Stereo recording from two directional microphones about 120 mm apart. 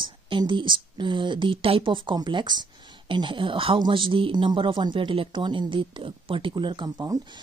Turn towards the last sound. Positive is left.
turn(degrees=-30)  # may be behind; listen again after turning